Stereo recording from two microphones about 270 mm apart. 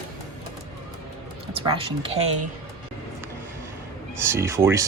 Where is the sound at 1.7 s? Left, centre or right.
Right.